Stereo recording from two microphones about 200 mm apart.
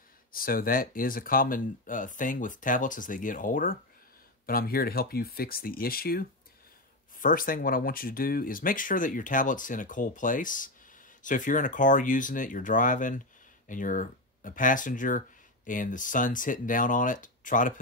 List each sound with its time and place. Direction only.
0.3 s speech: 45° left (ahead or behind)